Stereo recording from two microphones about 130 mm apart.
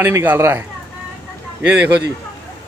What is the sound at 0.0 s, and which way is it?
Speech, 15° right (ahead or behind).